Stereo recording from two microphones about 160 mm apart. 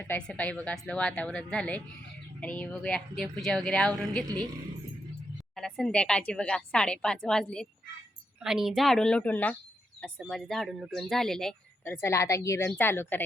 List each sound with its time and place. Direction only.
0.0 s a woman's voice: 10° left (ahead or behind)
5.5 s a woman's voice: 5° left (ahead or behind)
12.0 s a woman's voice: 20° left (ahead or behind)